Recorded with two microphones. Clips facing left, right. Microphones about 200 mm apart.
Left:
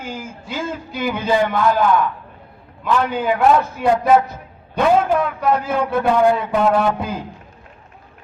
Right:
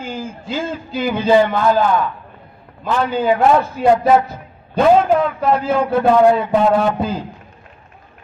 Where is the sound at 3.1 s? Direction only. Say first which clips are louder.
Right 3 dB; 30° right (ahead or behind).